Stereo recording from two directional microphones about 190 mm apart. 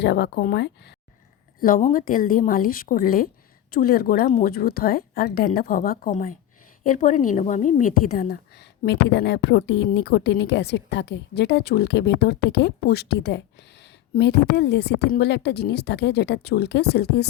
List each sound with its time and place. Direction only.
0.0 s a woman's voice: 65° left (ahead or behind)
1.5 s a woman's voice: 45° left (ahead or behind)
8.8 s a woman's voice: 60° left (ahead or behind)